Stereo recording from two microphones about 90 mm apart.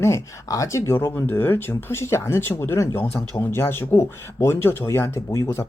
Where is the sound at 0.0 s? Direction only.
35° left (ahead or behind).